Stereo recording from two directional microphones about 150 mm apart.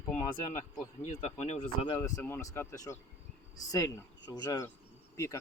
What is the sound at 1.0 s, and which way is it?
Speech, 50° left (ahead or behind).